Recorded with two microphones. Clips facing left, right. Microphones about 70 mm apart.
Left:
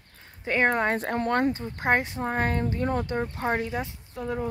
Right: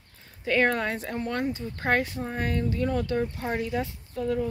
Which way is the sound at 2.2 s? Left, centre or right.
Left.